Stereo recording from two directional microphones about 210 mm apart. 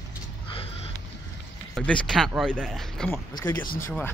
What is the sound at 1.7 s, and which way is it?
Speech, 5° left (ahead or behind).